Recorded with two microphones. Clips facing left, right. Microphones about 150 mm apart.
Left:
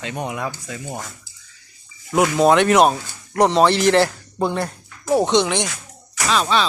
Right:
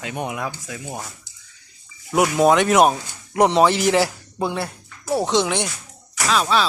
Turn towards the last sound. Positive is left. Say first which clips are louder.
# even
turn(degrees=-5)  # may be behind; listen again after turning